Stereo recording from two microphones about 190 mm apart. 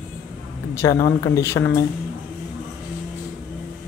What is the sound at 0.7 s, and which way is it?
Speech, 15° left (ahead or behind).